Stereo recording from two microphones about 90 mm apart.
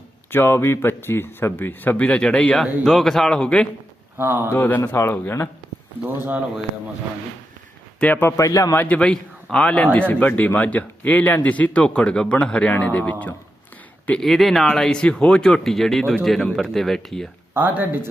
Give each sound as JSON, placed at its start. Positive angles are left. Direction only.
{"t": 0.3, "sound": "speech", "side_deg": 25}
{"t": 4.2, "sound": "speech", "side_deg": -25}
{"t": 4.5, "sound": "speech", "side_deg": 20}
{"t": 7.9, "sound": "speech", "side_deg": 15}
{"t": 8.4, "sound": "a man's voice", "side_deg": 40}
{"t": 8.7, "sound": "speech", "side_deg": 25}
{"t": 9.0, "sound": "speech", "side_deg": 10}
{"t": 14.1, "sound": "speech", "side_deg": 5}
{"t": 17.5, "sound": "speech", "side_deg": -20}